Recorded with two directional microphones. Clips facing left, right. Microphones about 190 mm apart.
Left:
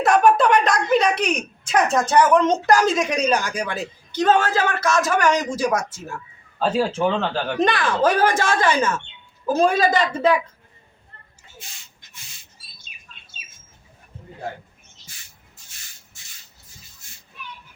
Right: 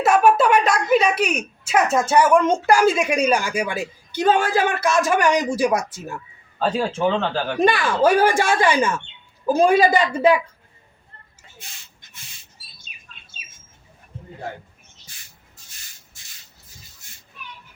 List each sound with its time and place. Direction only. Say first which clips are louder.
0.0 s a sound: even; 5° right (ahead or behind)
2.6 s a man's voice: right 1 dB; 10° right (ahead or behind)
6.6 s a man's voice: left 1 dB; centre (ahead or behind)